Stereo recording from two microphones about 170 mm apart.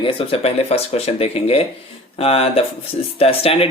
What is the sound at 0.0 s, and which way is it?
Speech, 35° left (ahead or behind).